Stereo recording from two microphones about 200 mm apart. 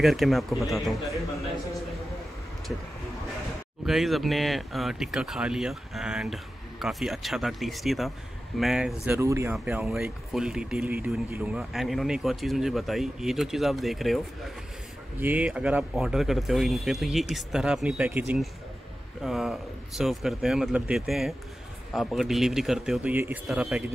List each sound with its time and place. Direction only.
0.0 s speech: centre (ahead or behind)
3.8 s speech: centre (ahead or behind)
9.0 s speech: 10° right (ahead or behind)